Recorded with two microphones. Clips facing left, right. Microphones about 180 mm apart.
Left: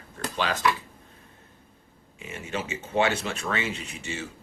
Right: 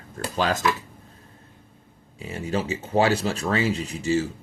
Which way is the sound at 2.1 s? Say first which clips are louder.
Right 6 dB; 35° right (ahead or behind).